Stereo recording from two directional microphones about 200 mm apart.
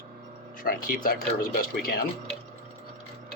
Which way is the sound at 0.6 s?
45° left (ahead or behind).